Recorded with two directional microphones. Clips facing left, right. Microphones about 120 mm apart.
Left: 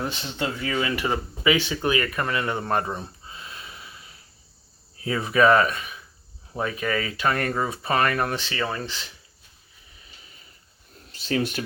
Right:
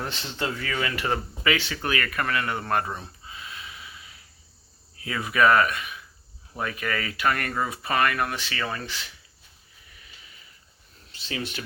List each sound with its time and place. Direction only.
0.1 s speech: 20° left (ahead or behind)
11.1 s speech: 40° left (ahead or behind)